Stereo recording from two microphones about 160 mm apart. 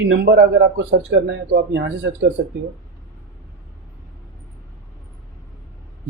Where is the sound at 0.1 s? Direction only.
90° right.